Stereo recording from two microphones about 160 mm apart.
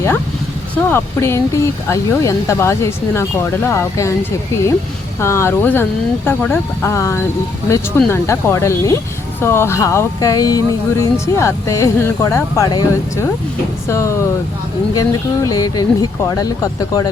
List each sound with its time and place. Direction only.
0.9 s speech: 15° left (ahead or behind)